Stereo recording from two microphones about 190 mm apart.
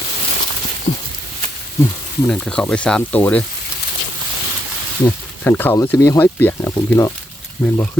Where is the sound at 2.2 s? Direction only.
5° left (ahead or behind).